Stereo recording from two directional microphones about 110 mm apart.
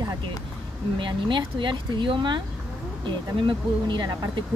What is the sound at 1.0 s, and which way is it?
A woman's voice, 45° right (ahead or behind).